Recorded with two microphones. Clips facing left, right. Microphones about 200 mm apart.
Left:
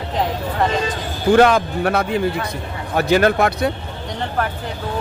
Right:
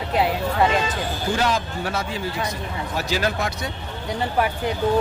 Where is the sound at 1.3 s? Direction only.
60° left (ahead or behind).